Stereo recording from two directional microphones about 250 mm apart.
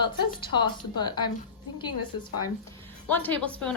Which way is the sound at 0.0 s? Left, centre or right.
Centre.